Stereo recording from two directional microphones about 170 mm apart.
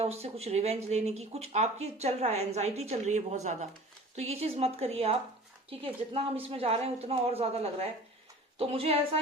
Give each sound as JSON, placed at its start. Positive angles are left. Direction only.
{"t": 0.0, "sound": "speech", "side_deg": -40}